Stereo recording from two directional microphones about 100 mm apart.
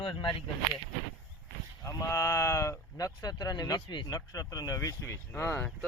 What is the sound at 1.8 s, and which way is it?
Speech, 30° left (ahead or behind).